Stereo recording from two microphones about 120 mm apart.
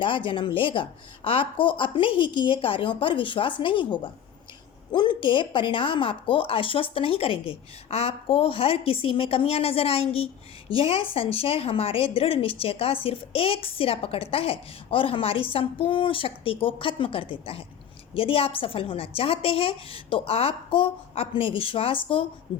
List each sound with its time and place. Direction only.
0.0 s a woman's voice: 45° left (ahead or behind)